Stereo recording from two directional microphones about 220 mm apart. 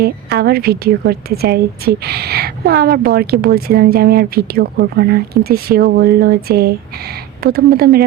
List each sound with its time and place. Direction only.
0.0 s a woman's voice: 50° right (ahead or behind)